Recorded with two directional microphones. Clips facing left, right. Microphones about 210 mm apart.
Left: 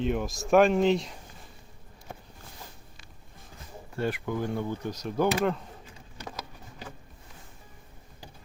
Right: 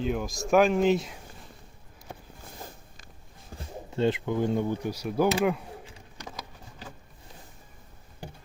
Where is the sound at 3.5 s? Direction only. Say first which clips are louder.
Right 7 dB; 45° right (ahead or behind).